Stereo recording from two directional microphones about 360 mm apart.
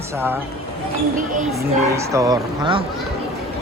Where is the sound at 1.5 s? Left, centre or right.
Centre.